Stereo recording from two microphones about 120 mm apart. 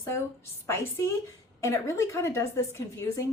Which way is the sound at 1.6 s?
25° left (ahead or behind).